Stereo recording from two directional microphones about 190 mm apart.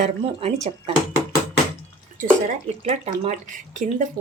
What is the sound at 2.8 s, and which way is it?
Speech, 40° right (ahead or behind).